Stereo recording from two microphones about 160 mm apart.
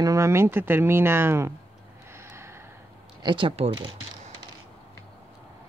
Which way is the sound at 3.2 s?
30° right (ahead or behind).